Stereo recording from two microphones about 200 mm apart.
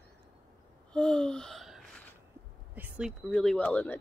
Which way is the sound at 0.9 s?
5° left (ahead or behind).